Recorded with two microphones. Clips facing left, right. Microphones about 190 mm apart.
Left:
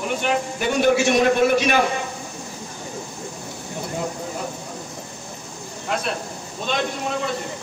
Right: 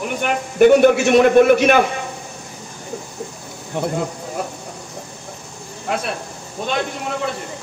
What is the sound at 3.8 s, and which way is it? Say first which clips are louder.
Speech: right 10 dB; 70° right (ahead or behind).